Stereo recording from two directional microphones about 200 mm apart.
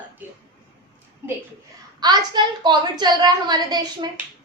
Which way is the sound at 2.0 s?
20° right (ahead or behind).